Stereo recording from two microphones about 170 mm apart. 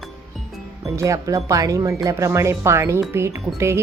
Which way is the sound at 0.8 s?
20° right (ahead or behind).